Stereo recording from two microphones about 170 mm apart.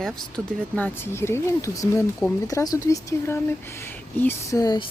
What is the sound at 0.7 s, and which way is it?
Speech, 10° left (ahead or behind).